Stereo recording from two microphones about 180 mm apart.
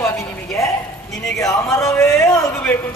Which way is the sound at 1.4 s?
15° left (ahead or behind).